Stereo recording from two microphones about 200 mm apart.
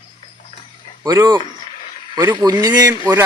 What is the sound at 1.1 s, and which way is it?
Speech, 20° right (ahead or behind).